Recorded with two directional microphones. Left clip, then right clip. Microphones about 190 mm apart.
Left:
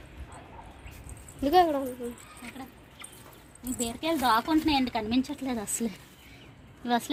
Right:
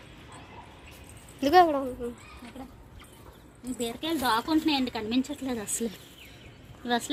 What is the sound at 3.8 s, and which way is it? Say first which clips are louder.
A woman's voice: left 1 dB; 60° left (ahead or behind).